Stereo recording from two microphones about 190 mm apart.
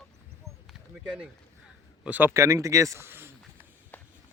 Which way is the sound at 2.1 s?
10° right (ahead or behind).